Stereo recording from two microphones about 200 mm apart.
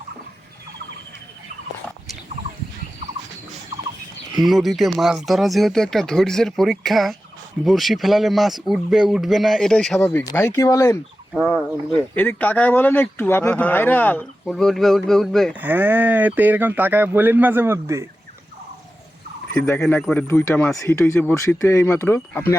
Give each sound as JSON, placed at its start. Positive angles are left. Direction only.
{"t": 4.4, "sound": "a man's voice", "side_deg": 0}
{"t": 12.1, "sound": "a man's voice", "side_deg": 10}
{"t": 15.6, "sound": "speech", "side_deg": -10}
{"t": 19.6, "sound": "speech", "side_deg": 10}